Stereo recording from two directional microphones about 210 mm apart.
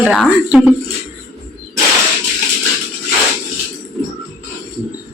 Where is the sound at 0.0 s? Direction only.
5° right (ahead or behind).